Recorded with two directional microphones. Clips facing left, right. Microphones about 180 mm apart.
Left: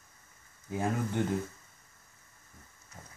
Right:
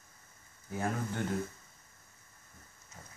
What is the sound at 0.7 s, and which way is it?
Speech, 15° left (ahead or behind).